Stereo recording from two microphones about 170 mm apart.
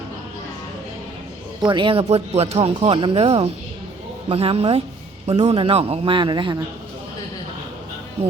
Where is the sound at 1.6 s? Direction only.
30° right (ahead or behind).